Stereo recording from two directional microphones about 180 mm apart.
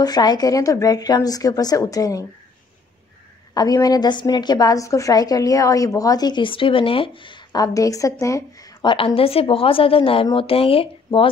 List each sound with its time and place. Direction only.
0.0 s a woman's voice: 20° left (ahead or behind)
3.5 s a woman's voice: 20° left (ahead or behind)